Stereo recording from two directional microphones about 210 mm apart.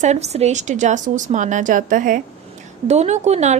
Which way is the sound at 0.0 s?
30° right (ahead or behind).